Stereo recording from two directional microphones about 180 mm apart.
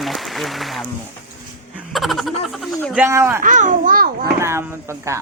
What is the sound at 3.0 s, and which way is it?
Speech, 15° right (ahead or behind).